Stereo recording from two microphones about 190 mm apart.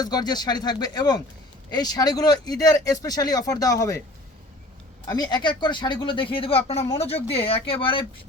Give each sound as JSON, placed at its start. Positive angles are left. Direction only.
{"t": 0.0, "sound": "speech", "side_deg": 20}
{"t": 5.0, "sound": "speech", "side_deg": 20}